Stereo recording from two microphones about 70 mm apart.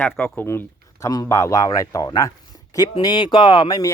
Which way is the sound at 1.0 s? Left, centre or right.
Left.